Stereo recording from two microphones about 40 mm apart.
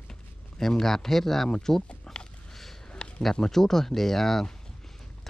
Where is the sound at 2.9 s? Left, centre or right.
Left.